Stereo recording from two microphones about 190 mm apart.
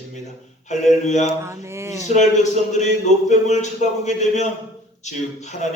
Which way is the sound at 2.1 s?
35° left (ahead or behind).